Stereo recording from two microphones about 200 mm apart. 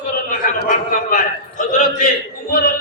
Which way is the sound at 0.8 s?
40° left (ahead or behind).